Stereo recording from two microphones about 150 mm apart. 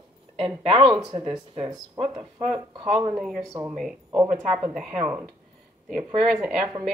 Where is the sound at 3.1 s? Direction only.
Centre (ahead or behind).